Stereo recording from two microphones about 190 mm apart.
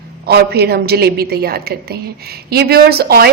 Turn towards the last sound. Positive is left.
turn(degrees=-55)  # may be behind; listen again after turning